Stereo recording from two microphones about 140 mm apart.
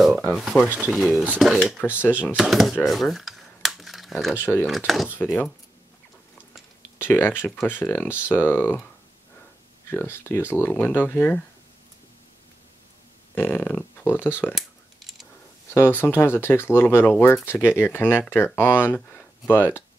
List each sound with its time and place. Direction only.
0.3 s speech: centre (ahead or behind)
2.8 s computer keyboard: centre (ahead or behind)
4.1 s speech: centre (ahead or behind)
4.4 s speech: 15° left (ahead or behind)
4.6 s speech: centre (ahead or behind)
5.2 s speech: 15° left (ahead or behind)
7.0 s speech: 15° left (ahead or behind)
9.8 s speech: 15° left (ahead or behind)
13.3 s speech: 15° left (ahead or behind)
14.5 s a sound: centre (ahead or behind)
15.7 s speech: 15° left (ahead or behind)